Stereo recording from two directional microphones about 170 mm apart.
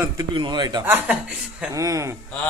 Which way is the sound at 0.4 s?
25° right (ahead or behind).